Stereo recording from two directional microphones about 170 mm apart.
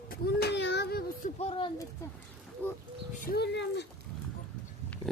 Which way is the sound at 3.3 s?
85° left.